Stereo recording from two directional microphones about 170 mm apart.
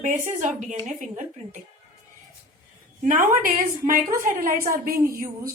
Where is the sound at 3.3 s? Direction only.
55° right (ahead or behind).